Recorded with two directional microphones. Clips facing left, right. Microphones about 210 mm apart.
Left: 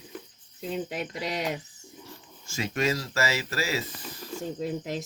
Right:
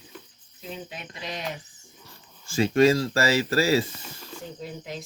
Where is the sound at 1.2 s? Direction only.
80° left.